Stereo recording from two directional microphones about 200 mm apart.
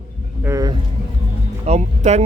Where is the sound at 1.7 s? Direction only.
35° right (ahead or behind).